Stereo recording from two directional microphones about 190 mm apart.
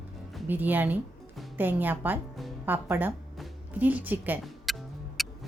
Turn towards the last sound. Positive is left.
turn(degrees=0)  # may be behind; listen again after turning